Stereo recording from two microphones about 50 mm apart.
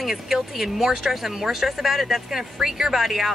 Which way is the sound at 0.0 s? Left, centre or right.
Centre.